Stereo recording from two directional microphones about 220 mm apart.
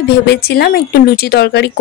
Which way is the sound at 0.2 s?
45° left (ahead or behind).